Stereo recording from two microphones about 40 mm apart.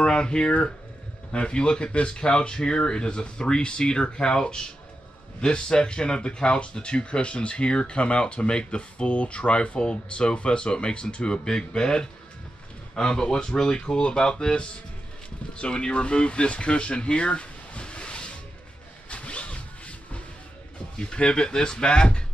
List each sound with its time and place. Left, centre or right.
0.0 s speech: left
19.0 s zipper: left
21.0 s speech: left